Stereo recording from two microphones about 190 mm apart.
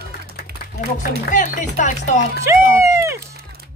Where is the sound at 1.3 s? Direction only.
40° left (ahead or behind).